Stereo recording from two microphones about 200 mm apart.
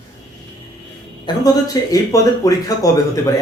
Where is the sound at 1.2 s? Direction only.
20° left (ahead or behind).